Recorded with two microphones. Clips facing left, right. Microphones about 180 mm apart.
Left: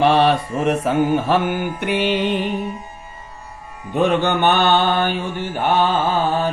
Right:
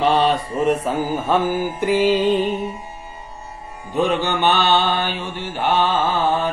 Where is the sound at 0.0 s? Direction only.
65° left (ahead or behind).